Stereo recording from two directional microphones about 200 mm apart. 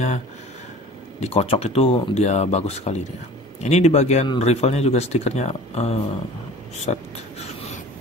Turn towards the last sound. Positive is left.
turn(degrees=35)  # may be behind; listen again after turning